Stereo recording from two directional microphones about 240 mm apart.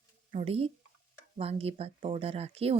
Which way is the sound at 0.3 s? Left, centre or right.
Right.